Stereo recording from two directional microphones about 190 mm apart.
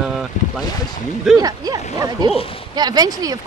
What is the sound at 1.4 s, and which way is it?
Speech, 20° right (ahead or behind).